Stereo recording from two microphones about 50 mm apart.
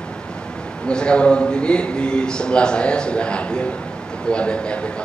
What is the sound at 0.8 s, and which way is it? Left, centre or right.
A man's voice, centre.